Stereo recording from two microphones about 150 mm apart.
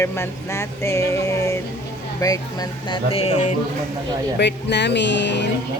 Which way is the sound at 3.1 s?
45° left (ahead or behind).